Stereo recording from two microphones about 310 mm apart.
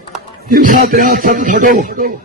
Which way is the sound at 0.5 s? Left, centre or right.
Right.